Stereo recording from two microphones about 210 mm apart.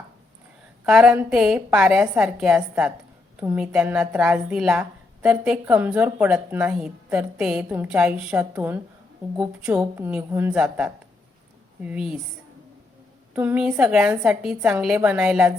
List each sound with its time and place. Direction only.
0.9 s a woman's voice: 5° right (ahead or behind)
13.3 s a woman's voice: 10° right (ahead or behind)